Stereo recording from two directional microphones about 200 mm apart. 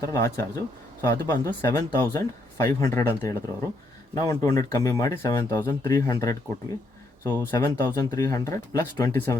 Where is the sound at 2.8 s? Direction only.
15° left (ahead or behind).